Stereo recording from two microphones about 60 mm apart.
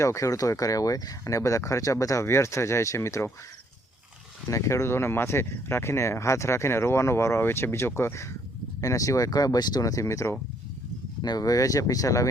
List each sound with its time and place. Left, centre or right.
0.0 s speech: left
2.2 s speech: left
4.4 s speech: left
8.8 s speech: left
11.2 s speech: left